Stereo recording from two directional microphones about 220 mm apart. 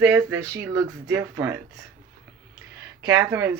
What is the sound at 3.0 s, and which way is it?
Speech, 15° right (ahead or behind).